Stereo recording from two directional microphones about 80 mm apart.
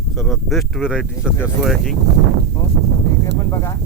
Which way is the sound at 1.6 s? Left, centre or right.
Centre.